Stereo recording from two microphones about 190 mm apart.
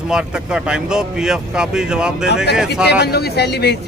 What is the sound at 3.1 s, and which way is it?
Speech, 60° left (ahead or behind).